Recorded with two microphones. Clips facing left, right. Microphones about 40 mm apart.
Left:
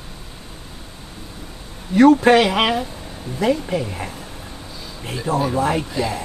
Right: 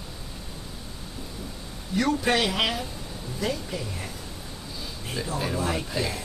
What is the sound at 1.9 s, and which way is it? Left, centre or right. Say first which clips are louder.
A man's voice: left 12 dB; left.